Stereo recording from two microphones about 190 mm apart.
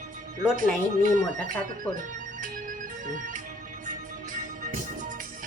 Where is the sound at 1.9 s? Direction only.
45° right (ahead or behind).